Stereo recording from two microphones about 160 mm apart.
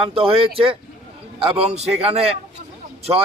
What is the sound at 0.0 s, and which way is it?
A man's voice, 35° right (ahead or behind).